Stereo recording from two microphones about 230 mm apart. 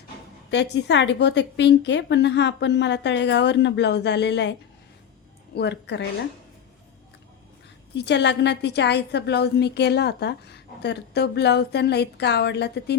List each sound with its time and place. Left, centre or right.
0.5 s a woman's voice: left
5.5 s a woman's voice: left
7.9 s a woman's voice: left